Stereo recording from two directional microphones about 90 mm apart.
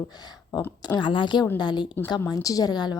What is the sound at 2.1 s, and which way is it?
Speech, 45° left (ahead or behind).